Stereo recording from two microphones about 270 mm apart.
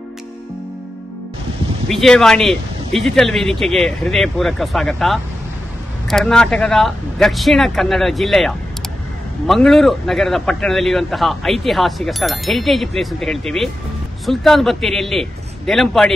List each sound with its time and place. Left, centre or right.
1.9 s speech: centre